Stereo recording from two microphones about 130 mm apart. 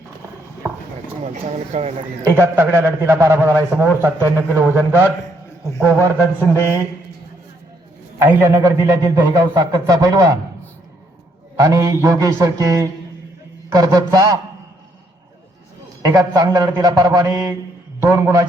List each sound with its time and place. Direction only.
0.6 s clip-clop: 15° right (ahead or behind)
1.2 s speech: 55° right (ahead or behind)
2.2 s a man's voice: 20° right (ahead or behind)
8.2 s a man's voice: 20° right (ahead or behind)
11.5 s a man's voice: 25° right (ahead or behind)
16.0 s a man's voice: 25° right (ahead or behind)